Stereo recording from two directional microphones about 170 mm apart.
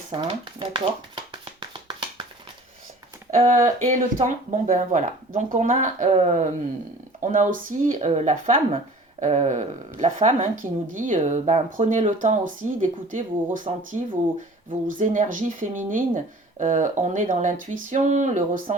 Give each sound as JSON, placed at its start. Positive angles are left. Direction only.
{"t": 0.1, "sound": "a sound", "side_deg": -30}
{"t": 3.3, "sound": "a woman's voice", "side_deg": -50}
{"t": 14.8, "sound": "a woman's voice", "side_deg": -50}